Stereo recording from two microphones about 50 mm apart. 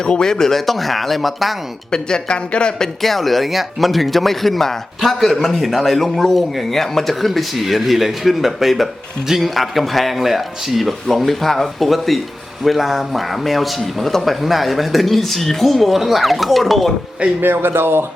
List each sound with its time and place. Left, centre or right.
0.0 s speech: centre
1.9 s speech: centre
17.4 s speech: right